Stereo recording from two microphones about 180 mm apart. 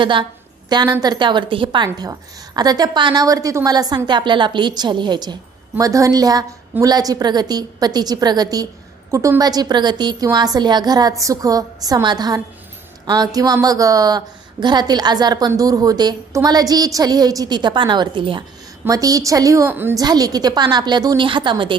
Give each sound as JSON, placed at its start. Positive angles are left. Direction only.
{"t": 0.0, "sound": "a woman's voice", "side_deg": -25}